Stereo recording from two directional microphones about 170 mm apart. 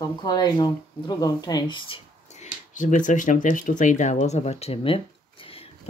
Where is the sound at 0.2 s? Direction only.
25° left (ahead or behind).